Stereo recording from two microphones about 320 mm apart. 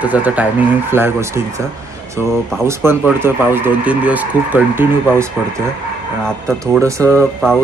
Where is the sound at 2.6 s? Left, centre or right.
Centre.